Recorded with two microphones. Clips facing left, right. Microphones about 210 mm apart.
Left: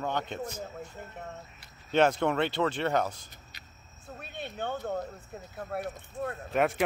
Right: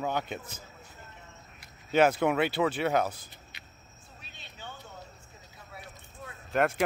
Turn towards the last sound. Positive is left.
turn(degrees=0)  # may be behind; listen again after turning